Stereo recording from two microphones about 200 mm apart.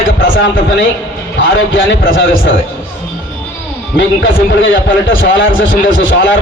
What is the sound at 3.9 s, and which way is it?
A man's voice, 70° left (ahead or behind).